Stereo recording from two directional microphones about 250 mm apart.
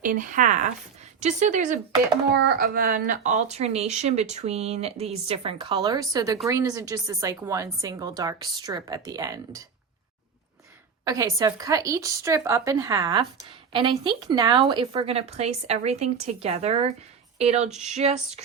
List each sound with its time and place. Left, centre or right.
0.0 s a woman's voice: right; by 9.6 s centre
11.0 s a woman's voice: centre